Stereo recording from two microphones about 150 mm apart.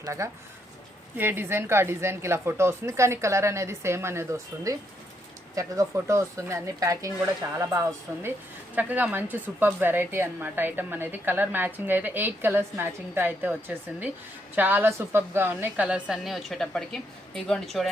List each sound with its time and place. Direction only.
0.0 s a woman's voice: 20° right (ahead or behind); by 17.9 s centre (ahead or behind)